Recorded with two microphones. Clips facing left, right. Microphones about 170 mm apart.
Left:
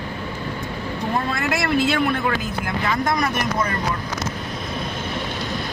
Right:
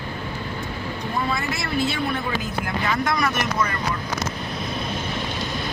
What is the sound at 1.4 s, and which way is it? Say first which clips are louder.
Speech: left 4 dB; 60° left (ahead or behind).